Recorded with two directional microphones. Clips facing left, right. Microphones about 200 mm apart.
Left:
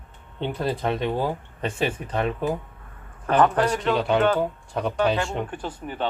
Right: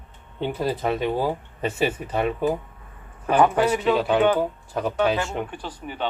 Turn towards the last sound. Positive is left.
turn(degrees=0)  # may be behind; listen again after turning